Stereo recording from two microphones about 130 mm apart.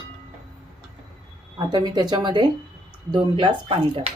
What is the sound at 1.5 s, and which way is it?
Speech, 35° right (ahead or behind).